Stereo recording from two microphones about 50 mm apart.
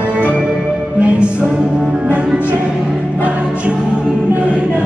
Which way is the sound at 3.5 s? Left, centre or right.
Right.